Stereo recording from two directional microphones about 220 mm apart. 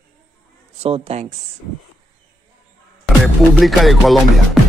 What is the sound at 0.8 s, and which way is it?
Speech, 25° right (ahead or behind).